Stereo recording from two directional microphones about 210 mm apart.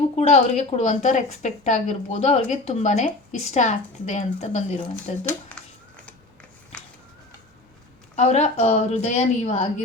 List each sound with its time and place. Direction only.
0.2 s a woman's voice: 30° left (ahead or behind)
8.1 s a woman's voice: 30° left (ahead or behind)